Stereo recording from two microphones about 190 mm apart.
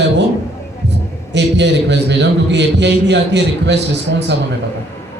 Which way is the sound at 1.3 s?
65° right (ahead or behind).